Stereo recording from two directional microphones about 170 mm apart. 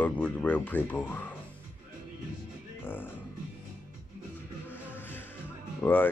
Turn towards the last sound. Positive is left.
turn(degrees=10)  # may be behind; listen again after turning